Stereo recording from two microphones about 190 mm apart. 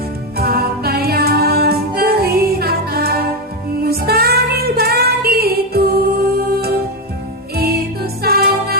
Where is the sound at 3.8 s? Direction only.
55° right (ahead or behind).